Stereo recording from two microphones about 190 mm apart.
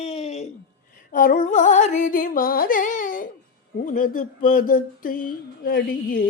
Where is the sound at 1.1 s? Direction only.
45° left (ahead or behind).